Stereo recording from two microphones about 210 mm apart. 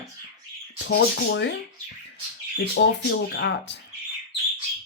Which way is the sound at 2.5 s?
55° left (ahead or behind).